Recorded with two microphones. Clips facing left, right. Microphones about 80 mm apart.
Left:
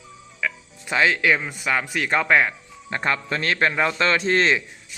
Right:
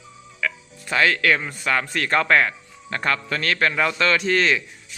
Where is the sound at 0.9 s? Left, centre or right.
Centre.